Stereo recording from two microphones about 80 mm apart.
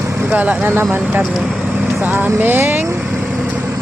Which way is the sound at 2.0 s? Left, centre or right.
Right.